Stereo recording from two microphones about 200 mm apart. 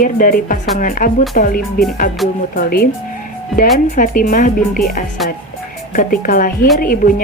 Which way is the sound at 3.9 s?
45° left (ahead or behind).